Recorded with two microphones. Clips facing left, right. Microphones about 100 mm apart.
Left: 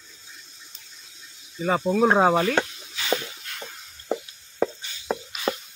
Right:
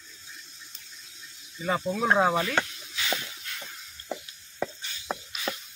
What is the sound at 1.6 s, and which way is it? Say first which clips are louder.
Speech: left 7 dB; 25° left (ahead or behind).